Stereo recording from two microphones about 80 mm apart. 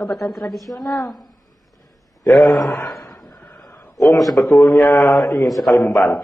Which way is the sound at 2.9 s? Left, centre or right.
Left.